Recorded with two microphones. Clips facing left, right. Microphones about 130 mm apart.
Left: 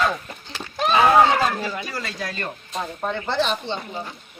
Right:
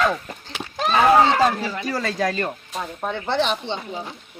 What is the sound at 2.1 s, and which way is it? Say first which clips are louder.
Music: right 8 dB; 45° right (ahead or behind).